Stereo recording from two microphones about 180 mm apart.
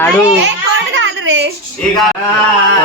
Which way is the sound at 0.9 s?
90° right.